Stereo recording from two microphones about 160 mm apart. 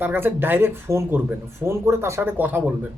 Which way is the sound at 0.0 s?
10° right (ahead or behind).